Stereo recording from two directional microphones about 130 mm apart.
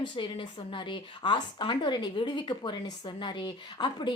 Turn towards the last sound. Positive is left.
turn(degrees=35)  # may be behind; listen again after turning